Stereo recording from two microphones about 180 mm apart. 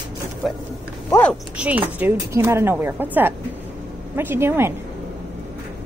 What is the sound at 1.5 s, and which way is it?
A woman's voice, 10° right (ahead or behind).